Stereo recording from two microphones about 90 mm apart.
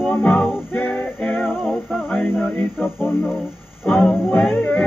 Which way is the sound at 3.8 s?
10° left (ahead or behind).